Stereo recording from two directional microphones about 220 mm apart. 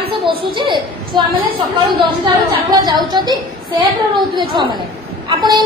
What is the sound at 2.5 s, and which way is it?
Speech, 20° right (ahead or behind).